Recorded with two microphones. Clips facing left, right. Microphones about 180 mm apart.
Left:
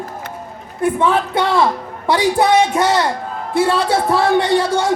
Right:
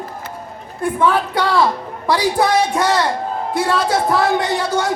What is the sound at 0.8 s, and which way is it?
Speech, 25° left (ahead or behind).